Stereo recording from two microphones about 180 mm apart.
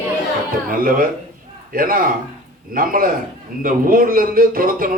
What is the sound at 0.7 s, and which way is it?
Speech, 50° right (ahead or behind).